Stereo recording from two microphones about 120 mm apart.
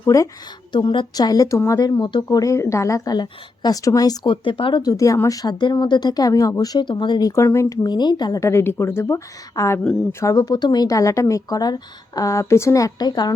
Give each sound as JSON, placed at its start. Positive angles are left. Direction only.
{"t": 0.0, "sound": "a woman's voice", "side_deg": 30}
{"t": 0.7, "sound": "a woman's voice", "side_deg": 40}
{"t": 2.2, "sound": "a woman's voice", "side_deg": 25}
{"t": 7.9, "sound": "speech", "side_deg": 35}